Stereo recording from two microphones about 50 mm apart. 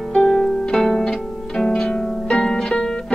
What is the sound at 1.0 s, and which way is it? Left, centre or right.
Zither, centre.